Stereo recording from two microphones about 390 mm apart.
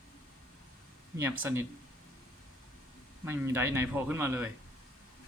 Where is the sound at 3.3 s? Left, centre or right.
Centre.